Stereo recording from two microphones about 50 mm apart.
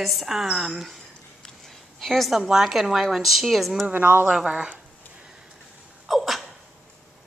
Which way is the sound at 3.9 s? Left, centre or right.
Right.